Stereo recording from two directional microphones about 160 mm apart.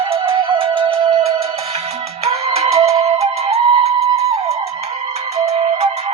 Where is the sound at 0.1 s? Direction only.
35° right (ahead or behind).